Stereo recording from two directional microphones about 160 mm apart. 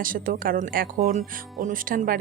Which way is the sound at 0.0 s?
60° right (ahead or behind).